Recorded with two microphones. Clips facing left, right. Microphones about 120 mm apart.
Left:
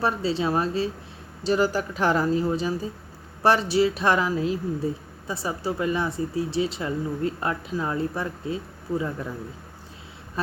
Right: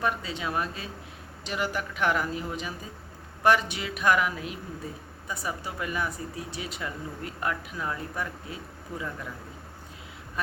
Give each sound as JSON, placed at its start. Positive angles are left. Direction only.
{"t": 0.0, "sound": "speech", "side_deg": 30}
{"t": 10.4, "sound": "speech", "side_deg": 30}